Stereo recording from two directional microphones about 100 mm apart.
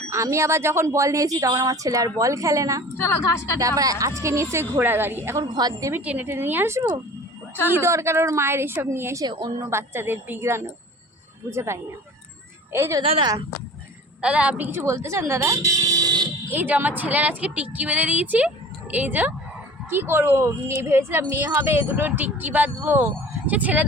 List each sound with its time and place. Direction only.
0.1 s speech: 30° right (ahead or behind)
3.0 s a woman's voice: 25° left (ahead or behind)
3.6 s speech: 35° right (ahead or behind)
5.5 s a woman's voice: 45° right (ahead or behind)
5.9 s speech: 20° right (ahead or behind)
9.2 s a woman's voice: 50° right (ahead or behind)
9.6 s speech: 25° right (ahead or behind)
13.0 s speech: 70° right (ahead or behind)
14.2 s speech: 10° right (ahead or behind)
14.7 s speech: 30° right (ahead or behind)
16.5 s speech: 20° right (ahead or behind)